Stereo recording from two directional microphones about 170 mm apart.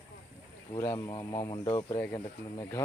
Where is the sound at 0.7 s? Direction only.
20° left (ahead or behind).